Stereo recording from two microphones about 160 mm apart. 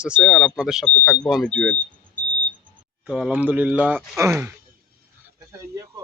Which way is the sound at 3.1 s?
5° right (ahead or behind).